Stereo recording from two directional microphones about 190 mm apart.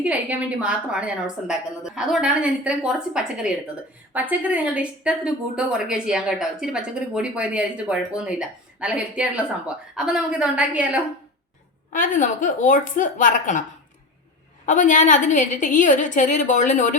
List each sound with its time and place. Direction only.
0.0 s speech: 5° right (ahead or behind)
11.9 s a woman's voice: 45° left (ahead or behind)
14.7 s a woman's voice: 40° left (ahead or behind)